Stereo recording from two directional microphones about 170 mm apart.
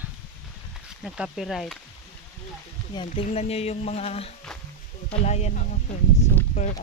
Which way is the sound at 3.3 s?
40° left (ahead or behind).